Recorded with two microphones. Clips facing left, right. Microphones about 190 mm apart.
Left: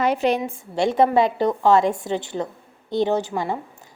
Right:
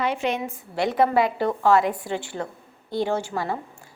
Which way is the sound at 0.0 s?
40° left (ahead or behind).